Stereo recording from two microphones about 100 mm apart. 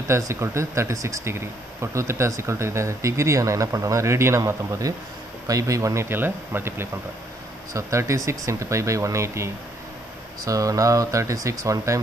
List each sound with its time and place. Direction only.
0.1 s speech: 30° right (ahead or behind)